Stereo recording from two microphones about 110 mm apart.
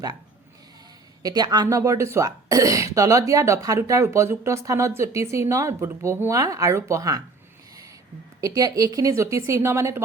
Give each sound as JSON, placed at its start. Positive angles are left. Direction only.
{"t": 1.2, "sound": "speech", "side_deg": -35}
{"t": 8.4, "sound": "speech", "side_deg": -30}